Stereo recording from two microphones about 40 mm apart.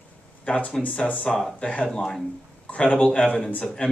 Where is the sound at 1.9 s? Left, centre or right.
Centre.